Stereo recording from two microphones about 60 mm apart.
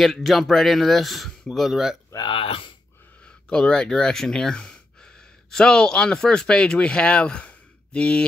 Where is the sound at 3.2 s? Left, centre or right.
Centre.